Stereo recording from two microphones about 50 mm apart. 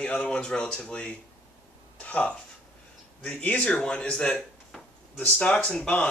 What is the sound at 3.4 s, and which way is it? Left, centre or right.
Speech, left.